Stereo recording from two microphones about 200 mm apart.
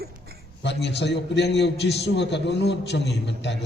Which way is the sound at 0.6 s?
60° left (ahead or behind).